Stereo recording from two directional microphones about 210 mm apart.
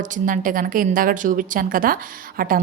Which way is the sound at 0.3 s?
40° right (ahead or behind).